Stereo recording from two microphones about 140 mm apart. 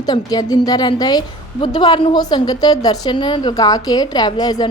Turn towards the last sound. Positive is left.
turn(degrees=30)  # may be behind; listen again after turning